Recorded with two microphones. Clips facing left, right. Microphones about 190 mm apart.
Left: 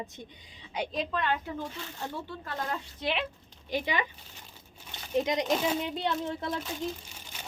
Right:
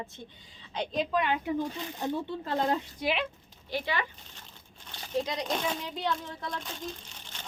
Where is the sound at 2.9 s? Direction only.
5° right (ahead or behind).